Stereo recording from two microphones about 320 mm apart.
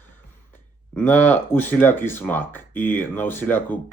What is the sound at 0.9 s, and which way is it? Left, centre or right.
Speech, centre.